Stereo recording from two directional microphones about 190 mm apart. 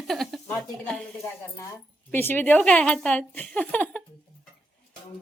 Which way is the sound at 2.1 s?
10° left (ahead or behind).